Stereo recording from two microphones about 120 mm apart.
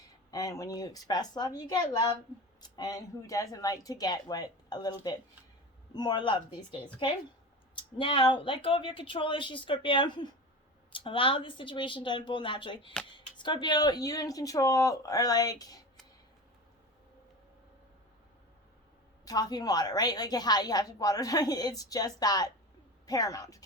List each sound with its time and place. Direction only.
0.3 s a woman's voice: 30° left (ahead or behind)
7.8 s a woman's voice: 45° left (ahead or behind); by 15.8 s 30° left (ahead or behind)
19.2 s a woman's voice: 30° left (ahead or behind)